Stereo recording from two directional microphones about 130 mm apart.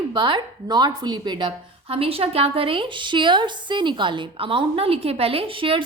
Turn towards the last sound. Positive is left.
turn(degrees=-40)  # may be behind; listen again after turning